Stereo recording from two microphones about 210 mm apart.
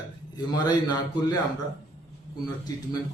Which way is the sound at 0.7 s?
20° left (ahead or behind).